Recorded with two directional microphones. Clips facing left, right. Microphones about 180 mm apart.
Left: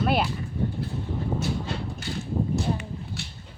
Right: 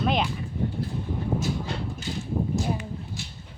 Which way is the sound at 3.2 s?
65° left (ahead or behind).